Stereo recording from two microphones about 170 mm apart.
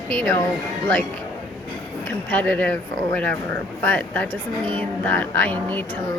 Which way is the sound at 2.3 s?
10° left (ahead or behind).